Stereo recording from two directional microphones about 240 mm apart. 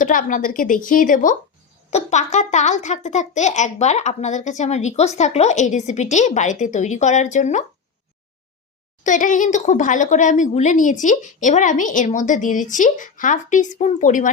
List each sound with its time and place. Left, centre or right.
0.0 s speech: left
9.0 s speech: left